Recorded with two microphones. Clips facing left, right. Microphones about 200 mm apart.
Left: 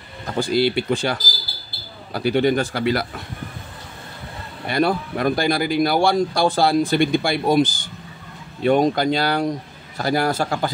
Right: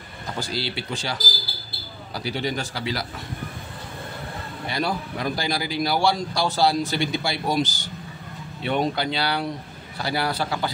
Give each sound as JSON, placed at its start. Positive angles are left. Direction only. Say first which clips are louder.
{"t": 0.4, "sound": "speech", "louder": "left 11 dB", "side_deg": 55}
{"t": 4.6, "sound": "speech", "louder": "left 7 dB", "side_deg": 55}